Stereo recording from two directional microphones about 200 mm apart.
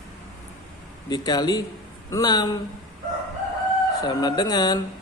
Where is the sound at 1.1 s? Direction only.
20° left (ahead or behind).